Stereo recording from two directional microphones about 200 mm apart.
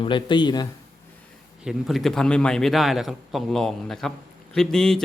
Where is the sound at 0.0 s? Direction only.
25° left (ahead or behind).